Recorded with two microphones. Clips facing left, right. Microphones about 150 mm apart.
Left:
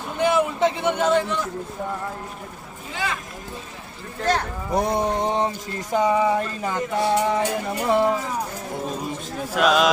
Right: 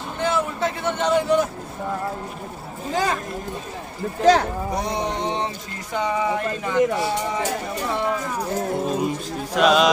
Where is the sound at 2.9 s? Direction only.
40° right (ahead or behind).